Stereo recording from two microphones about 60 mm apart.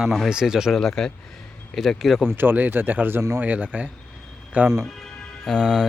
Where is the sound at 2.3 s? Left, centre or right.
Right.